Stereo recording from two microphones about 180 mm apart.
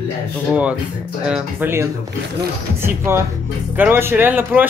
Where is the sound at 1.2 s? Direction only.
5° right (ahead or behind).